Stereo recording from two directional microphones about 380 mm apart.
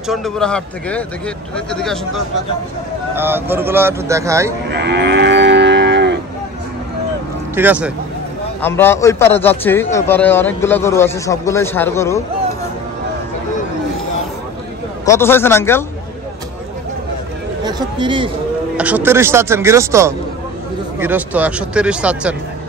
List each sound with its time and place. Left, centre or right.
0.1 s a man's voice: centre
4.6 s moo: right
7.5 s a man's voice: centre
15.0 s speech: centre
17.6 s a man's voice: centre